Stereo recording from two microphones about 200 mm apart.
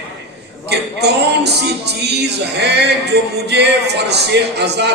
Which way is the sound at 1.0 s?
55° right (ahead or behind).